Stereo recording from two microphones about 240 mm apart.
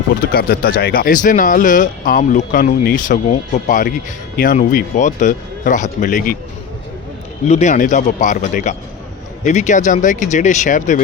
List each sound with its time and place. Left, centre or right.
0.3 s speech: left
7.4 s speech: left